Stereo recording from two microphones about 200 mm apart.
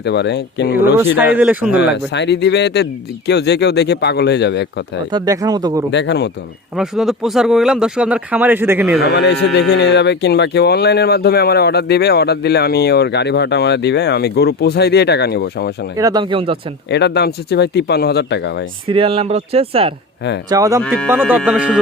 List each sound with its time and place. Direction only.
0.0 s speech: 60° left (ahead or behind)
1.1 s speech: 10° right (ahead or behind)
1.7 s speech: 60° left (ahead or behind)
5.1 s speech: 20° right (ahead or behind)
5.9 s speech: 60° left (ahead or behind)
6.7 s speech: centre (ahead or behind)
9.0 s speech: 55° left (ahead or behind)
16.0 s speech: 20° right (ahead or behind)
16.9 s speech: 55° left (ahead or behind)
18.9 s speech: 25° right (ahead or behind)
20.5 s speech: 15° right (ahead or behind)